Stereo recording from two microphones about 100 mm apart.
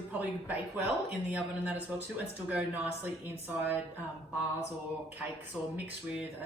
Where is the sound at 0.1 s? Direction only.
15° right (ahead or behind).